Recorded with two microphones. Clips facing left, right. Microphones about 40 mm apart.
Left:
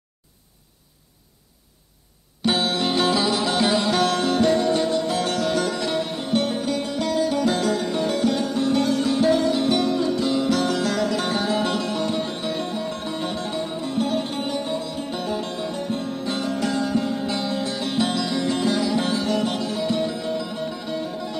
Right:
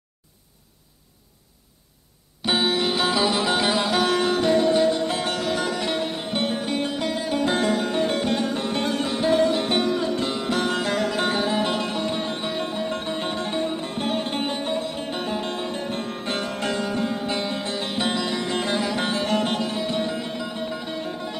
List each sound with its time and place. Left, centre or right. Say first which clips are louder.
2.4 s music: even; centre
3.1 s music: even; centre
4.9 s music: left 2 dB; right
5.2 s music: left 2 dB; centre
5.6 s music: left 1 dB; right